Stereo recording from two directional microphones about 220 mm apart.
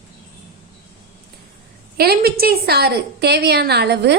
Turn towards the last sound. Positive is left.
turn(degrees=-50)  # may be behind; listen again after turning